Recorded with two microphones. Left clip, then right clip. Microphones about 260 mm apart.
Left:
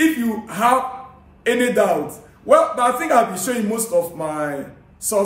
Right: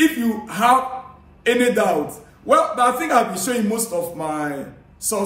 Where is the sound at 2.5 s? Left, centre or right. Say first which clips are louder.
Left 1 dB; centre.